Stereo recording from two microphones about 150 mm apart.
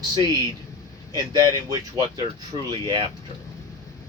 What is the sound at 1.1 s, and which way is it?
Speech, 25° right (ahead or behind).